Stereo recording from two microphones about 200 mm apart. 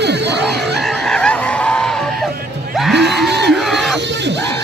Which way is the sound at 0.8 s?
Centre (ahead or behind).